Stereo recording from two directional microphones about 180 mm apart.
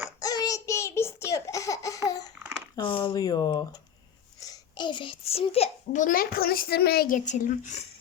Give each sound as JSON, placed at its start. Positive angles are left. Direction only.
{"t": 0.2, "sound": "babbling", "side_deg": 20}
{"t": 2.7, "sound": "a child's voice", "side_deg": 25}